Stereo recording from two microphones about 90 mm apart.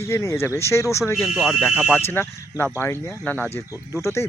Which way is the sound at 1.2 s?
Centre (ahead or behind).